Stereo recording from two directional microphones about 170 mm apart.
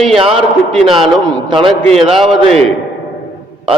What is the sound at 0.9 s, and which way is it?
Speech, 30° right (ahead or behind).